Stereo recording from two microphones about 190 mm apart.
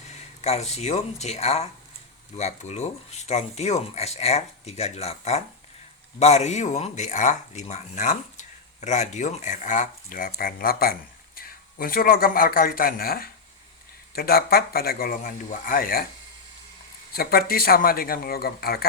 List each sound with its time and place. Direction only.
0.4 s a man's voice: 35° left (ahead or behind)
17.2 s a man's voice: 50° left (ahead or behind)